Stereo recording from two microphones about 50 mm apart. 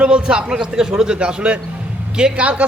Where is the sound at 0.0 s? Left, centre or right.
Centre.